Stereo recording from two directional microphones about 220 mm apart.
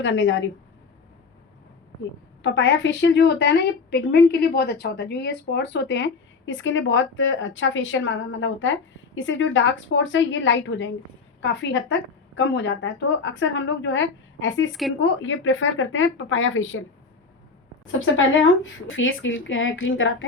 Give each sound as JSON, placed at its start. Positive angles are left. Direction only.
{"t": 0.0, "sound": "a woman's voice", "side_deg": 60}
{"t": 2.4, "sound": "a woman's voice", "side_deg": 55}
{"t": 14.7, "sound": "speech", "side_deg": 0}
{"t": 14.9, "sound": "a woman's voice", "side_deg": 60}
{"t": 18.0, "sound": "a woman's voice", "side_deg": 60}